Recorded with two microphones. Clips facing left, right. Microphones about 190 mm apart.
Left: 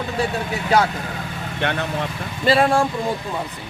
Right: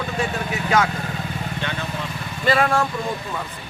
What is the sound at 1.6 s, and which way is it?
Speech, 65° left (ahead or behind).